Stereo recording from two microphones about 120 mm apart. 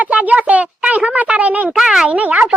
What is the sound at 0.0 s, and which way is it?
Speech, 10° right (ahead or behind).